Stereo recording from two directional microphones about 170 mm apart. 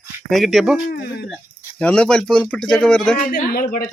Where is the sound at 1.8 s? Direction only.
5° left (ahead or behind).